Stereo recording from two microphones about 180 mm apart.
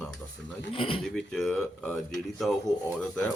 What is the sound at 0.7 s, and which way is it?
Speech, 30° left (ahead or behind).